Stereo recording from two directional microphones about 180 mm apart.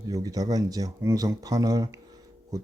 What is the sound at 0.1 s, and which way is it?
Speech, 20° right (ahead or behind).